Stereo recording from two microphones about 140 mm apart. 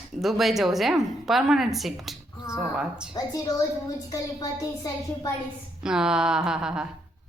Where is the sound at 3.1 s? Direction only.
25° left (ahead or behind).